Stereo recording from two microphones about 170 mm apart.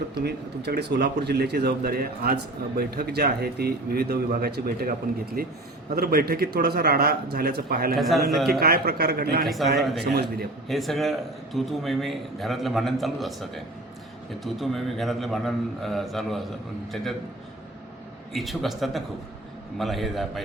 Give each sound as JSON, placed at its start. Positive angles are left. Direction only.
{"t": 0.2, "sound": "speech", "side_deg": -75}
{"t": 7.9, "sound": "a man's voice", "side_deg": 0}
{"t": 8.4, "sound": "speech", "side_deg": -65}
{"t": 9.7, "sound": "a man's voice", "side_deg": 0}
{"t": 10.0, "sound": "speech", "side_deg": -70}
{"t": 10.7, "sound": "a man's voice", "side_deg": 0}
{"t": 18.3, "sound": "a man's voice", "side_deg": 0}